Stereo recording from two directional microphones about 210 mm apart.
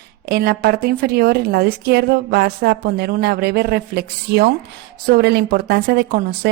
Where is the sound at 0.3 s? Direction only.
50° right (ahead or behind).